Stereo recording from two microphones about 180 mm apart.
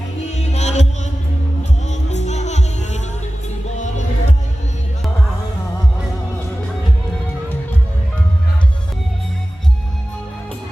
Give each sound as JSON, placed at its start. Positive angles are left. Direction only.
{"t": 0.5, "sound": "music", "side_deg": 40}
{"t": 1.9, "sound": "music", "side_deg": 40}